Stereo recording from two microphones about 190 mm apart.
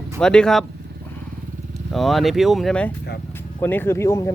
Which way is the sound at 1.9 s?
Centre (ahead or behind).